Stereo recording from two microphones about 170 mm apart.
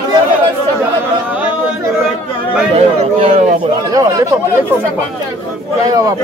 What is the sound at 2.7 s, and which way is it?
Speech, 40° right (ahead or behind).